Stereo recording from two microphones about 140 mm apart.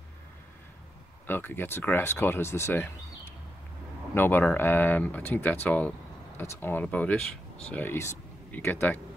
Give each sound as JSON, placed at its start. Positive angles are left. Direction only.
{"t": 1.2, "sound": "speech", "side_deg": 15}
{"t": 4.1, "sound": "speech", "side_deg": 15}